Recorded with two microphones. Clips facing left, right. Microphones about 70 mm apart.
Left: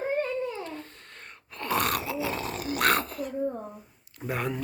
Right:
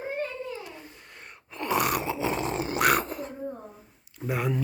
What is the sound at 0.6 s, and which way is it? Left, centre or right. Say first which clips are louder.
Groan: left 4 dB; centre.